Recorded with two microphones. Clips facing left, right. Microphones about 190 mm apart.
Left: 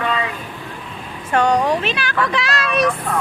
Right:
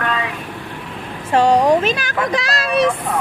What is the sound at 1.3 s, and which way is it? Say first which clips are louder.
Speech: right 3 dB; 30° right (ahead or behind).